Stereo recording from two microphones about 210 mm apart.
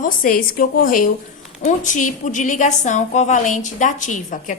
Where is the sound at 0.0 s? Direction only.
40° left (ahead or behind).